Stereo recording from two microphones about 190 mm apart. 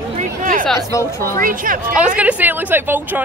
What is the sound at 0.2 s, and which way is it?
Chatter, 45° right (ahead or behind).